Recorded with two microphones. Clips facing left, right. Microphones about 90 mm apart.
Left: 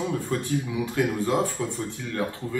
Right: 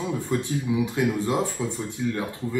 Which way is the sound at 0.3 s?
15° right (ahead or behind).